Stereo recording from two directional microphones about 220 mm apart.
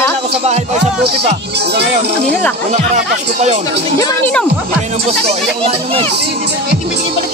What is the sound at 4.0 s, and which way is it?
Speech, 10° left (ahead or behind).